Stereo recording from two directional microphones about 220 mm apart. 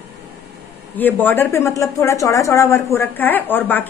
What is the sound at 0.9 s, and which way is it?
Speech, 10° left (ahead or behind).